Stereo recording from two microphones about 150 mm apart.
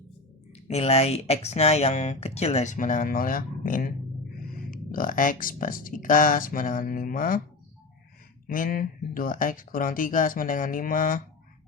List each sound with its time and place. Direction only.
0.5 s speech: 45° left (ahead or behind); by 7.4 s 70° left (ahead or behind)
8.4 s speech: 65° left (ahead or behind)